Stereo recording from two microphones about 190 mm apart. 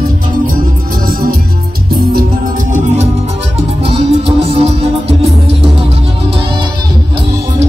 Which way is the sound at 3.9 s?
30° right (ahead or behind).